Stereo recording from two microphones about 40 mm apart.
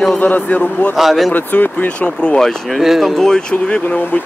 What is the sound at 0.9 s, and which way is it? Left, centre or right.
Speech, centre.